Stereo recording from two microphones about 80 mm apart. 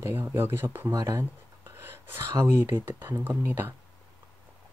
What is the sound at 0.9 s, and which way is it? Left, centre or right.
Speech, right.